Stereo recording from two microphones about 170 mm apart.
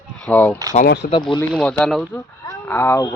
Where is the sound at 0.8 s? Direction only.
75° left (ahead or behind).